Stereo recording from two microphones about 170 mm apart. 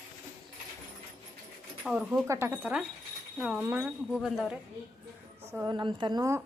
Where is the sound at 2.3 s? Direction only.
10° right (ahead or behind).